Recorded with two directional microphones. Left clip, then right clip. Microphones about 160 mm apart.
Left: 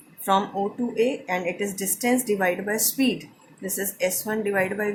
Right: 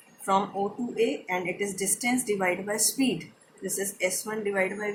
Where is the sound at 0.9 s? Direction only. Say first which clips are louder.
Left 3 dB; 45° left (ahead or behind).